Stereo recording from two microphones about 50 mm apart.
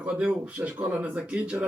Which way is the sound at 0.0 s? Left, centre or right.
Right.